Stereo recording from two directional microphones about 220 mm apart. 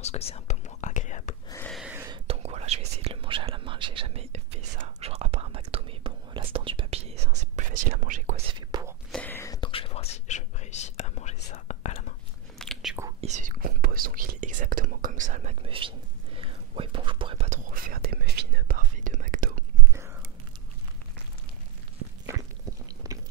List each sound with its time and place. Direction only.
0.0 s whispering: 30° left (ahead or behind)
1.7 s a sound: 5° right (ahead or behind)
2.0 s whispering: 30° right (ahead or behind)
8.5 s whispering: 20° right (ahead or behind)
9.1 s whispering: 10° left (ahead or behind); by 12.1 s 30° left (ahead or behind)
12.5 s biting: centre (ahead or behind)
13.2 s whispering: 35° right (ahead or behind)
22.3 s a sound: 15° right (ahead or behind)